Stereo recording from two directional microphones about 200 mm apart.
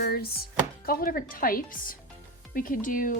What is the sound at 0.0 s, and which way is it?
Speech, 50° left (ahead or behind).